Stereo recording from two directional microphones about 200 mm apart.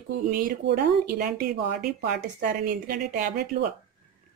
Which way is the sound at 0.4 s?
50° right (ahead or behind).